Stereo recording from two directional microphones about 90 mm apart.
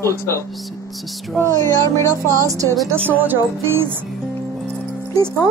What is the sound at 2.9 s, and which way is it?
Speech, 25° right (ahead or behind).